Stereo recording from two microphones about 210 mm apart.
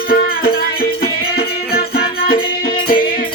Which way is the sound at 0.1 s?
45° left (ahead or behind).